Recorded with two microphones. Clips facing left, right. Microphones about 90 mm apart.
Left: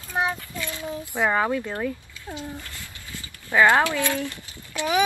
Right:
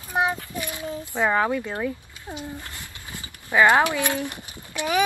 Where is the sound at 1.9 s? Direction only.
20° right (ahead or behind).